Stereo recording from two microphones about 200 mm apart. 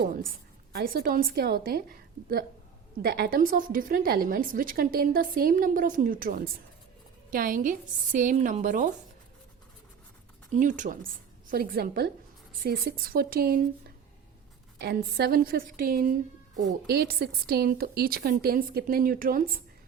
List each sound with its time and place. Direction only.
0.7 s a woman's voice: 50° right (ahead or behind)
10.5 s a woman's voice: 40° right (ahead or behind)
14.8 s a woman's voice: 50° right (ahead or behind)